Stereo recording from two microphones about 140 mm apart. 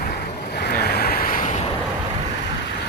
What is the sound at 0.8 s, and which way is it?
Waves, 90° left.